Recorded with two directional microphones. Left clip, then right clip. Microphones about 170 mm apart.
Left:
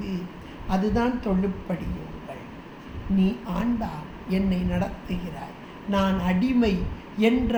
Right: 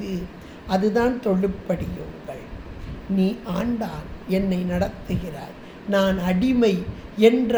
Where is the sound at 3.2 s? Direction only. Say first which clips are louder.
Right 3 dB; 60° right (ahead or behind).